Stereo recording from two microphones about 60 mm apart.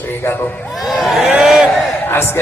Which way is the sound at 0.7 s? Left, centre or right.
Centre.